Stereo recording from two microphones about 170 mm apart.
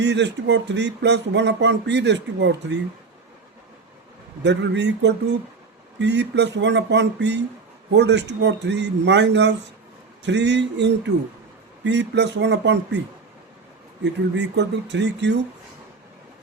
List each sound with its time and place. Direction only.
0.0 s speech: 90° right
4.4 s speech: 90° right
14.0 s speech: 90° right